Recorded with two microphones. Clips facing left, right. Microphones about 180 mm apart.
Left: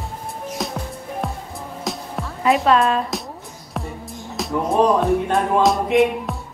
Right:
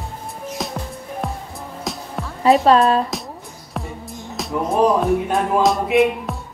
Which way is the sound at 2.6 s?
35° right (ahead or behind).